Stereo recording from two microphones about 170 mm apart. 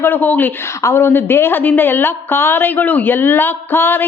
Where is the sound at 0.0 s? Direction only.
10° left (ahead or behind).